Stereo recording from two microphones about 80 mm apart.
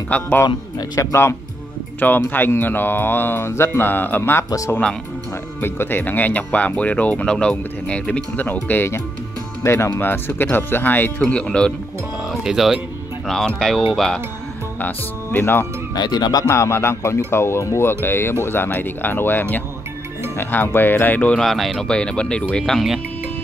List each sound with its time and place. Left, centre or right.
0.1 s speech: left
1.0 s speech: left
2.0 s speech: left
4.5 s speech: left
5.6 s speech: left; by 11.7 s centre
12.3 s speech: centre
13.3 s speech: centre
14.8 s speech: left
15.9 s speech: left
16.4 s speech: left
21.4 s speech: centre